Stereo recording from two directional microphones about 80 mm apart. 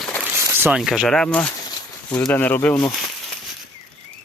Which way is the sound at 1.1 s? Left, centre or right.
Centre.